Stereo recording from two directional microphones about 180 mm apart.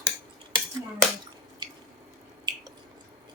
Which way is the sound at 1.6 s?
25° right (ahead or behind).